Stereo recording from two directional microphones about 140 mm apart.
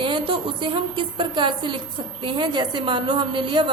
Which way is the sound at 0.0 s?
40° right (ahead or behind).